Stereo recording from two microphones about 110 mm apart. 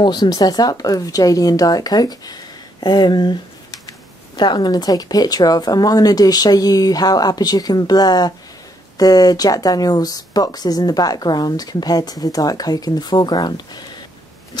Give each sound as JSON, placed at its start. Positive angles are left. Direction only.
{"t": 0.0, "sound": "speech", "side_deg": 40}